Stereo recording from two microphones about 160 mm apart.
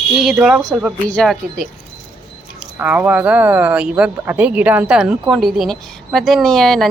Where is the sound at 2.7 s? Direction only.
10° right (ahead or behind).